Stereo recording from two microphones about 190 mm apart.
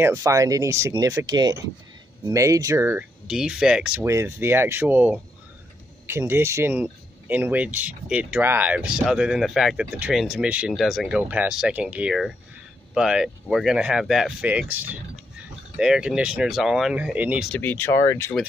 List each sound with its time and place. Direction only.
0.0 s speech: 15° right (ahead or behind)
17.5 s speech: 10° left (ahead or behind)